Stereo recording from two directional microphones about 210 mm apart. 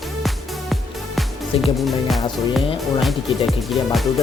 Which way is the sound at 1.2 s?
Centre (ahead or behind).